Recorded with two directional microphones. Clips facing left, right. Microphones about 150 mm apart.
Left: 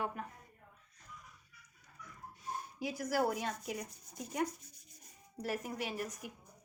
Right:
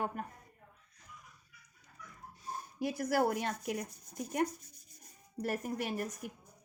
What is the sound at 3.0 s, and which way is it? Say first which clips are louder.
A woman's voice: right 2 dB; 60° right (ahead or behind).